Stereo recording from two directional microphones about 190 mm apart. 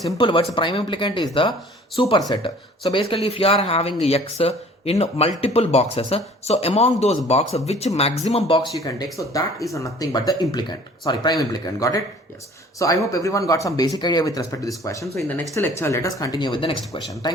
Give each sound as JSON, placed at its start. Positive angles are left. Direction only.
{"t": 0.2, "sound": "speech", "side_deg": 25}
{"t": 9.1, "sound": "speech", "side_deg": 15}